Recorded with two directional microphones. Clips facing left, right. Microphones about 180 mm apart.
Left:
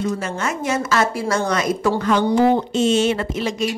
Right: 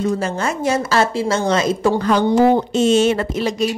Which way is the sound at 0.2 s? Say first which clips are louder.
Right 4 dB; 30° right (ahead or behind).